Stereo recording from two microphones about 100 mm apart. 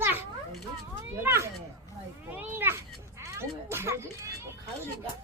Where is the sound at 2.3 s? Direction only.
20° right (ahead or behind).